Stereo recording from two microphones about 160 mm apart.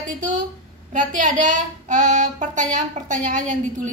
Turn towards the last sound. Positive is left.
turn(degrees=-50)  # may be behind; listen again after turning